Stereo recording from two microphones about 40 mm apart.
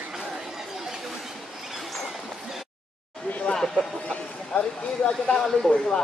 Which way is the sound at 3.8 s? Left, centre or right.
Right.